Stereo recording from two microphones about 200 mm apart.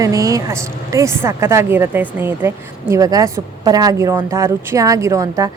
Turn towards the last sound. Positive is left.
turn(degrees=-15)  # may be behind; listen again after turning